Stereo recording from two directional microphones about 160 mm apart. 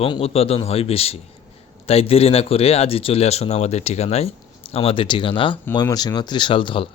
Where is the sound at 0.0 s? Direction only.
35° left (ahead or behind).